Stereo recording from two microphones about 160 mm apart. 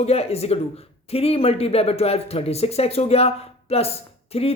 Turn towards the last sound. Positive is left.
turn(degrees=40)  # may be behind; listen again after turning